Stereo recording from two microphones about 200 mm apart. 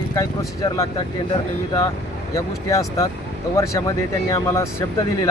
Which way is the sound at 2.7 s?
15° left (ahead or behind).